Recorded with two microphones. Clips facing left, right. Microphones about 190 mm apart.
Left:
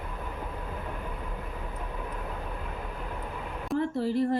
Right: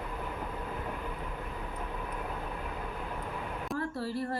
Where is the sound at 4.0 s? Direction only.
20° left (ahead or behind).